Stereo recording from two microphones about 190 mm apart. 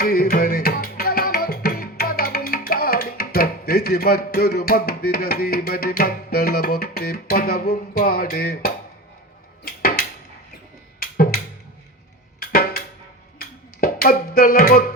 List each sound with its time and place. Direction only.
0.0 s music: 50° left (ahead or behind)
9.6 s a sound: 50° left (ahead or behind)
11.0 s music: 50° left (ahead or behind)
12.4 s music: 50° left (ahead or behind)